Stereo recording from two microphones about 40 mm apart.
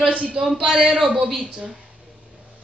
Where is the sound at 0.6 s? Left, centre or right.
Centre.